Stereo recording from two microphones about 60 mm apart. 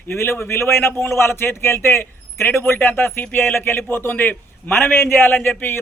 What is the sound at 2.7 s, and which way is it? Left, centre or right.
A man's voice, left.